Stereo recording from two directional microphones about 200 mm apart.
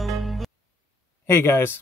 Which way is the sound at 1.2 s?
10° left (ahead or behind).